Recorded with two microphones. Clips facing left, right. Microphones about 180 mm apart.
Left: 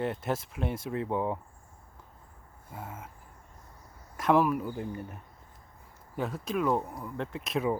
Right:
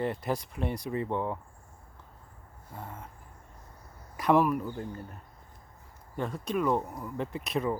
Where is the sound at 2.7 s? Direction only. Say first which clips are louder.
Left 1 dB; 5° left (ahead or behind).